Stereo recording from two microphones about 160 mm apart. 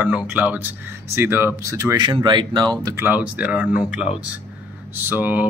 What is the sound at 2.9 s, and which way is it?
Speech, 10° right (ahead or behind).